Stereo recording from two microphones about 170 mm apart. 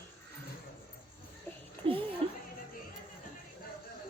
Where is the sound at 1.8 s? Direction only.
30° right (ahead or behind).